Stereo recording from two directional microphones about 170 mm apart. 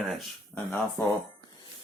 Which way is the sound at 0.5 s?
10° left (ahead or behind).